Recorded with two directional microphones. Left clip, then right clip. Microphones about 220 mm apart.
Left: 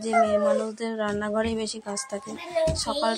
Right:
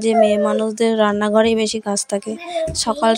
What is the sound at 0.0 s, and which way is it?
Speech, 35° right (ahead or behind).